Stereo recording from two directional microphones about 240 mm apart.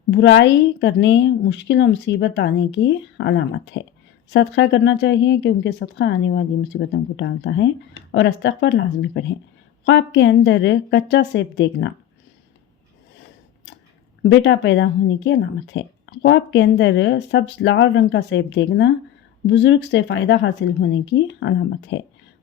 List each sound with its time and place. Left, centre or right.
0.1 s speech: left
14.3 s speech: left